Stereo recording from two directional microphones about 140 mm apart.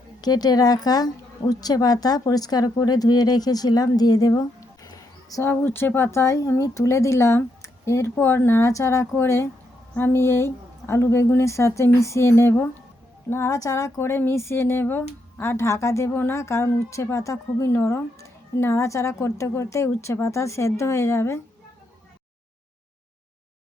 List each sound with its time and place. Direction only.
0.2 s a woman's voice: 30° left (ahead or behind)